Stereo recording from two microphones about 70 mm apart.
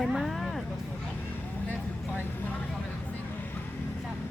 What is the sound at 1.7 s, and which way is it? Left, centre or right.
Vehicle, left.